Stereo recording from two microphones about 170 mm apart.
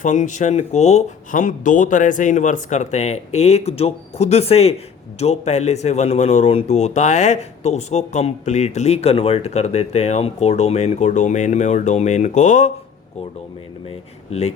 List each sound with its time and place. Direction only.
0.0 s speech: 45° left (ahead or behind)
13.8 s speech: 40° left (ahead or behind)